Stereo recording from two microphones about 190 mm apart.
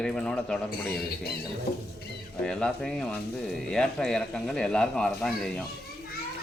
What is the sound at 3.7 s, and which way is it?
Speech, 5° left (ahead or behind).